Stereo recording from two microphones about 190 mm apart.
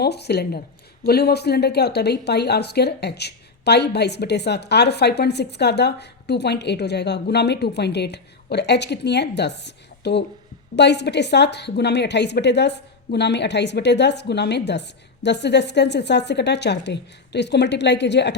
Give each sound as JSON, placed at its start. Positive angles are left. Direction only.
{"t": 0.0, "sound": "a woman's voice", "side_deg": 60}